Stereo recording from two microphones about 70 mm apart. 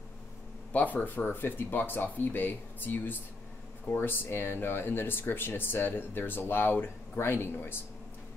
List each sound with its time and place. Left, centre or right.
0.7 s speech: left